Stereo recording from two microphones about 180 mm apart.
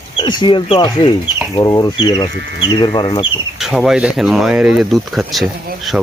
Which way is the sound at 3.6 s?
Centre (ahead or behind).